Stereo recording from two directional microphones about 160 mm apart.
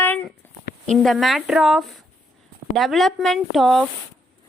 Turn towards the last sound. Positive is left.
turn(degrees=0)  # may be behind; listen again after turning